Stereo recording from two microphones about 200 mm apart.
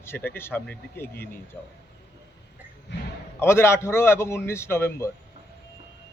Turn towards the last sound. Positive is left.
turn(degrees=10)  # may be behind; listen again after turning